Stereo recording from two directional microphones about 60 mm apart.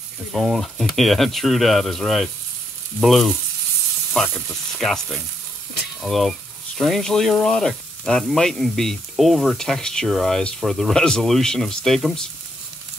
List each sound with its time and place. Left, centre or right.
0.3 s speech: centre
4.9 s speech: centre